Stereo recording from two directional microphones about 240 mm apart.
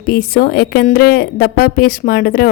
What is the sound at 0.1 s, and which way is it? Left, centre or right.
A woman's voice, left.